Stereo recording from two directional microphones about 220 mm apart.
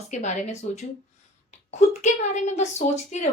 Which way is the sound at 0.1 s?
35° left (ahead or behind).